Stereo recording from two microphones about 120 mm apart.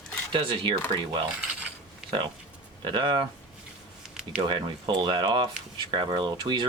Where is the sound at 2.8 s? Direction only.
40° right (ahead or behind).